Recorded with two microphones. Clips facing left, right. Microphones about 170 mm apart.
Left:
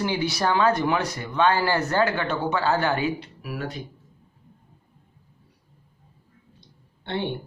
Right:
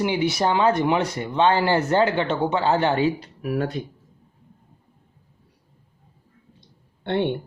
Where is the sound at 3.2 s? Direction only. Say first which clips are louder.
Right 8 dB; 50° right (ahead or behind).